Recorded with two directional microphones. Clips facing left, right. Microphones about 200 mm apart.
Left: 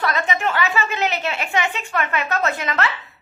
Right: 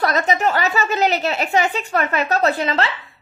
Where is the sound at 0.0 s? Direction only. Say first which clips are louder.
Right 4 dB; 40° right (ahead or behind).